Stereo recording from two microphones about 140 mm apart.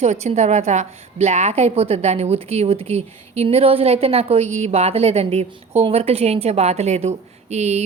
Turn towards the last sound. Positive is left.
turn(degrees=-50)  # may be behind; listen again after turning